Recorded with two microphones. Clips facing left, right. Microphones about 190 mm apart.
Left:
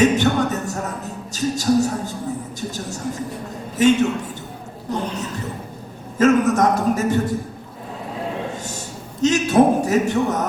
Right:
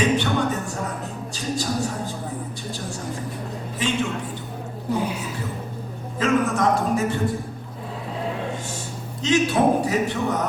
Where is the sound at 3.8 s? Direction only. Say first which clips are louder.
Left 11 dB; 45° left (ahead or behind).